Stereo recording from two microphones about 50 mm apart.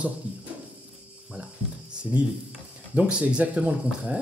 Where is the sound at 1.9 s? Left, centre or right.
Right.